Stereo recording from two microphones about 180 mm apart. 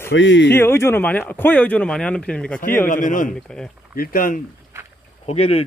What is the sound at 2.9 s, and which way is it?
A man's voice, 45° left (ahead or behind).